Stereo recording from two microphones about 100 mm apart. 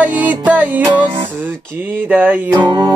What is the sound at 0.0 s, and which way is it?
Music, 15° right (ahead or behind).